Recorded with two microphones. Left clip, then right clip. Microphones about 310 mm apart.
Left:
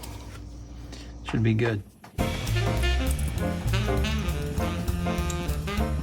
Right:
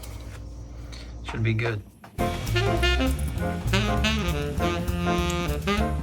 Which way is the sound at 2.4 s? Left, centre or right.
Centre.